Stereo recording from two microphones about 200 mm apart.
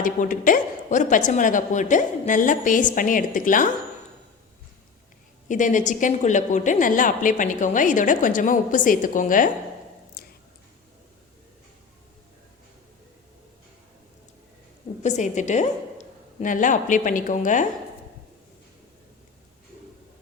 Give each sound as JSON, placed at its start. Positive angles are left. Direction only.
{"t": 0.0, "sound": "a woman's voice", "side_deg": 40}
{"t": 5.5, "sound": "a woman's voice", "side_deg": 40}
{"t": 10.2, "sound": "a sound", "side_deg": 55}
{"t": 15.0, "sound": "a woman's voice", "side_deg": 35}